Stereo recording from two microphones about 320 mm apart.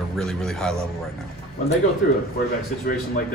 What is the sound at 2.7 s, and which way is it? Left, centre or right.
Speech, left.